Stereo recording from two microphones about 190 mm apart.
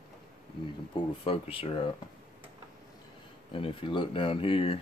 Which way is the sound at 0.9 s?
30° left (ahead or behind).